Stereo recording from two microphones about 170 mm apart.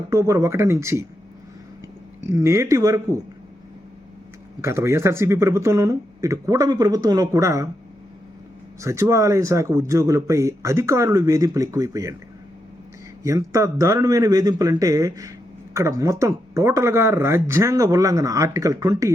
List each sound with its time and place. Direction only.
0.1 s speech: 15° right (ahead or behind)
2.3 s speech: 15° right (ahead or behind)
4.6 s speech: 15° right (ahead or behind)
8.8 s speech: 15° right (ahead or behind)
13.2 s a man's voice: 20° right (ahead or behind)